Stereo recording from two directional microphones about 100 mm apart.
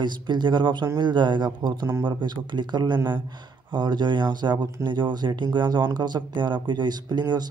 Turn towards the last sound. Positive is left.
turn(degrees=-45)  # may be behind; listen again after turning